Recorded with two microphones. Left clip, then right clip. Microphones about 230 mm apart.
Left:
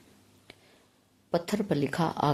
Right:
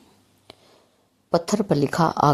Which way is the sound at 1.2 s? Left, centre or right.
Right.